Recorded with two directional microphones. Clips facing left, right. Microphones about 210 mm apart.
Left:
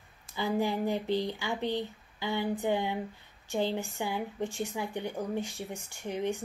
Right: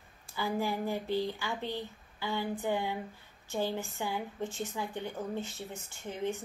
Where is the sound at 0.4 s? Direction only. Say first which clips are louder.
Left 3 dB; 20° left (ahead or behind).